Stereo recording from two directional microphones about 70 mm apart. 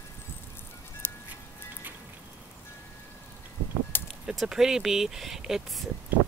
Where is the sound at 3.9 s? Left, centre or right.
Left.